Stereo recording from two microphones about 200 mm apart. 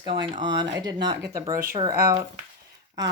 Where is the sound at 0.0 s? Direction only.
25° right (ahead or behind).